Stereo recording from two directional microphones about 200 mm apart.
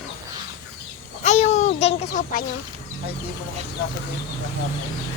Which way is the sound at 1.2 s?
35° left (ahead or behind).